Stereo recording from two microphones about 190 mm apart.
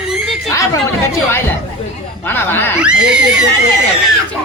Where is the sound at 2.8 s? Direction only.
5° right (ahead or behind).